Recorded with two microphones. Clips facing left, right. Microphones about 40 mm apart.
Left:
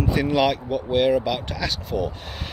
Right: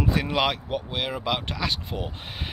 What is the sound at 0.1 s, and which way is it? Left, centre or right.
Speech, centre.